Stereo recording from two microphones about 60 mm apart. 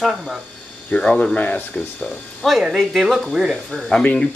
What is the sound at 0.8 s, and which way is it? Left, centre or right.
Speech, centre.